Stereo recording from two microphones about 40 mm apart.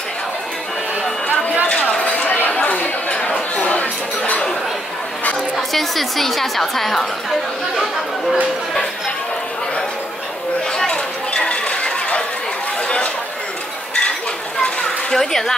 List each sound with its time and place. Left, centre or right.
1.2 s a sound: left
2.5 s chatter: left
3.1 s chatter: left
3.5 s a sound: left
5.6 s a woman's voice: centre
10.9 s chatter: left
14.6 s children playing: left
15.1 s speech: centre